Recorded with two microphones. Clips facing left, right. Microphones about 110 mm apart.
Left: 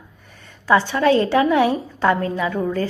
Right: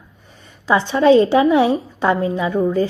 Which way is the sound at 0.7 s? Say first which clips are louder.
Right 3 dB; 20° right (ahead or behind).